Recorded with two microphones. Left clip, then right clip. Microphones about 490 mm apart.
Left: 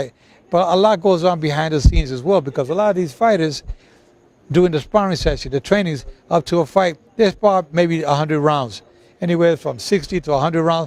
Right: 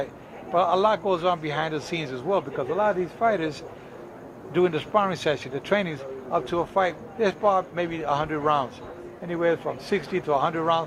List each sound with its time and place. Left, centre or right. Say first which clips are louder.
0.5 s a man's voice: left 7 dB; left
4.5 s a man's voice: left 7 dB; left